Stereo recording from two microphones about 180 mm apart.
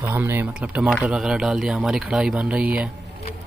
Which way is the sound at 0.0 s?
15° right (ahead or behind).